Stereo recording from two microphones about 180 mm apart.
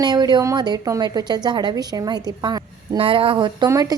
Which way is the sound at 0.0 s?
20° right (ahead or behind).